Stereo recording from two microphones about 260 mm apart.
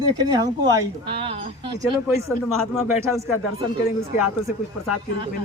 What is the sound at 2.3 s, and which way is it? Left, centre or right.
Speech, centre.